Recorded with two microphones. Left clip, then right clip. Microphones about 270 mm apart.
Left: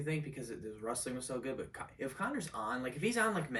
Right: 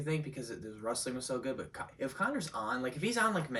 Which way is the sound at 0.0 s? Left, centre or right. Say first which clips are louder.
Right 2 dB; centre.